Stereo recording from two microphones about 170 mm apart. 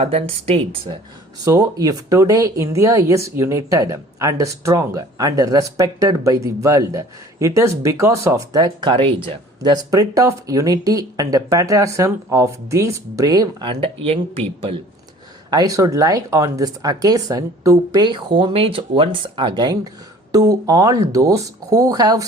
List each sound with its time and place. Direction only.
0.0 s speech: 35° right (ahead or behind)
1.5 s speech: 20° right (ahead or behind)
15.4 s speech: 20° right (ahead or behind)